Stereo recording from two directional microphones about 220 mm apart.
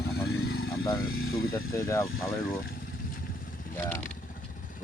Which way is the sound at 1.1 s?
70° left (ahead or behind).